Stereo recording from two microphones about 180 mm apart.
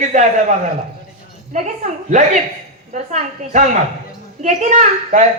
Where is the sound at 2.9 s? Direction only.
40° right (ahead or behind).